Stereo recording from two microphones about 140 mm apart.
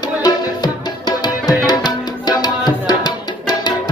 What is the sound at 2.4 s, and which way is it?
Tabla, 30° left (ahead or behind).